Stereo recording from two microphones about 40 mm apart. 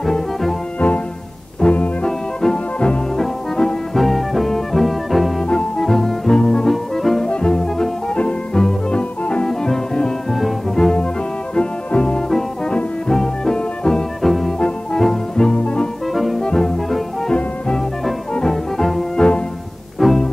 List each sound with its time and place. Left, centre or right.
0.0 s music: centre
0.7 s music: left
2.0 s music: centre
3.9 s music: centre
7.2 s music: left
10.3 s music: centre
11.5 s music: left
12.3 s music: centre
15.5 s music: left
18.3 s music: centre
18.8 s music: centre